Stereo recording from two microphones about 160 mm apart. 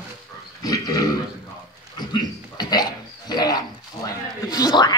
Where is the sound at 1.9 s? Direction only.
25° left (ahead or behind).